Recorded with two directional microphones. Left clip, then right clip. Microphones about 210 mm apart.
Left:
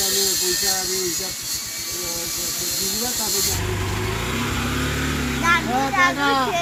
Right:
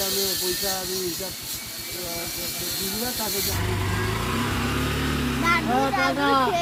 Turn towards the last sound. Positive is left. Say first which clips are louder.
# left 1 dB
turn(degrees=15)  # may be behind; listen again after turning